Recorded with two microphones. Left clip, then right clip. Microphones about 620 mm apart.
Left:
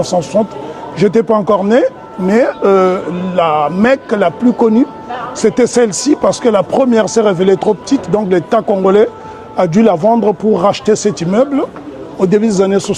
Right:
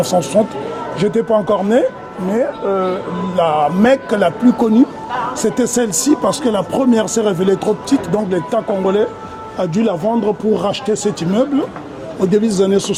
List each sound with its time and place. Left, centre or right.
0.0 s speech: centre
2.3 s speech: left
3.3 s speech: left